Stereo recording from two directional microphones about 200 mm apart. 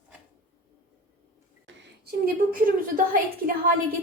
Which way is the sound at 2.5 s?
45° right (ahead or behind).